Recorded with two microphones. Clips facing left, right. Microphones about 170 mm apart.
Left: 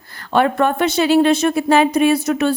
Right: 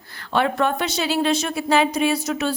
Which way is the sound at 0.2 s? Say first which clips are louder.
Left 5 dB; 50° left (ahead or behind).